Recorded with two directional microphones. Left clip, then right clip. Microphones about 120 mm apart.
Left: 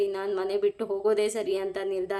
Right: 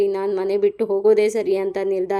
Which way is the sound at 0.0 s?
30° right (ahead or behind).